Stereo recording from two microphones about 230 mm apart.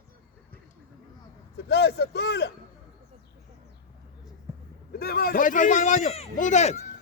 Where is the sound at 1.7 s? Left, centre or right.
Left.